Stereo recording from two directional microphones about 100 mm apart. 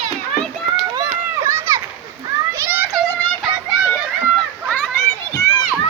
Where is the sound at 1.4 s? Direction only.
30° right (ahead or behind).